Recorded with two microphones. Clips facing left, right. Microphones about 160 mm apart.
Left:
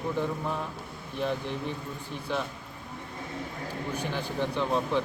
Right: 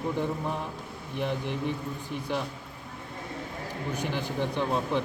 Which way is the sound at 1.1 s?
15° right (ahead or behind).